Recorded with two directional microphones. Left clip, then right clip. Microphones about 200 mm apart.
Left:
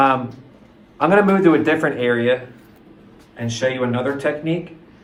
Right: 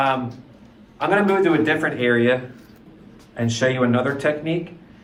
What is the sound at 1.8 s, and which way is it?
Speech, 15° left (ahead or behind).